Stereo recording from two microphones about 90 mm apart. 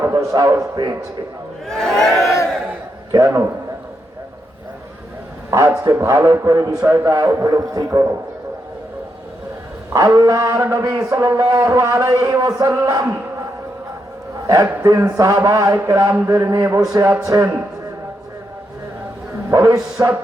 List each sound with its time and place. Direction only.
0.1 s a man's voice: 40° right (ahead or behind)
1.6 s crowd: 5° left (ahead or behind)
3.1 s a man's voice: 35° right (ahead or behind)
5.5 s a man's voice: 35° right (ahead or behind)
9.9 s a man's voice: 40° right (ahead or behind)
14.4 s a man's voice: 40° right (ahead or behind)
19.5 s a man's voice: 35° right (ahead or behind)